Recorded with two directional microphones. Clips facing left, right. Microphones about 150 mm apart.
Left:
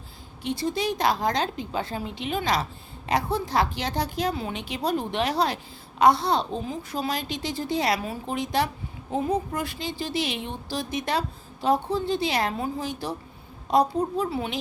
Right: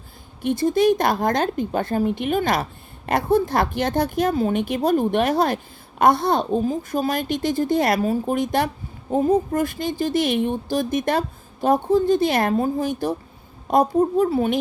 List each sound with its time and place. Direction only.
0.4 s speech: 50° right (ahead or behind)